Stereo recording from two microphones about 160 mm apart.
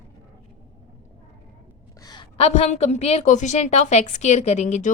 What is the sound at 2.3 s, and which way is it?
A woman's voice, 40° left (ahead or behind).